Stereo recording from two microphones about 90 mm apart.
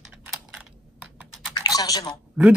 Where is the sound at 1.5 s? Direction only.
45° left (ahead or behind).